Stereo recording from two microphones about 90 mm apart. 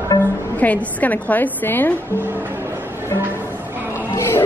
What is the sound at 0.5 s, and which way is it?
A woman's voice, 15° left (ahead or behind).